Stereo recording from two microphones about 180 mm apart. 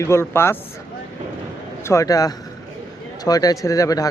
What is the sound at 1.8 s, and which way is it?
Speech, 20° left (ahead or behind).